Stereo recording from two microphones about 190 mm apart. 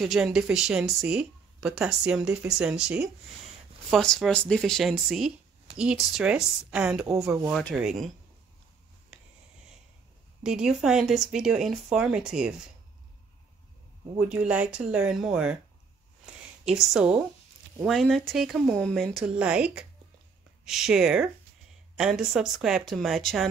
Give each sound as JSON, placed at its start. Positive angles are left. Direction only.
{"t": 0.0, "sound": "speech", "side_deg": 0}
{"t": 7.1, "sound": "speech", "side_deg": -15}
{"t": 7.7, "sound": "speech", "side_deg": 0}
{"t": 9.1, "sound": "writing", "side_deg": -5}
{"t": 10.4, "sound": "speech", "side_deg": -5}
{"t": 14.3, "sound": "speech", "side_deg": -5}
{"t": 16.6, "sound": "speech", "side_deg": 0}